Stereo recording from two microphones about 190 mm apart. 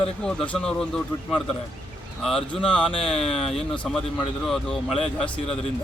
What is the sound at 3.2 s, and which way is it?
Speech, 30° left (ahead or behind).